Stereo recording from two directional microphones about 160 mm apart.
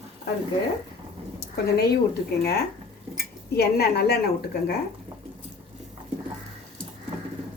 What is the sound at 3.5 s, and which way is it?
A woman's voice, 80° left.